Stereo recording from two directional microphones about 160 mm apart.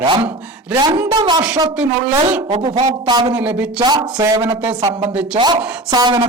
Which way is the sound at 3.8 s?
25° right (ahead or behind).